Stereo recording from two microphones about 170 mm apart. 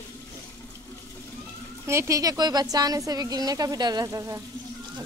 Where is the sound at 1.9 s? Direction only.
15° right (ahead or behind).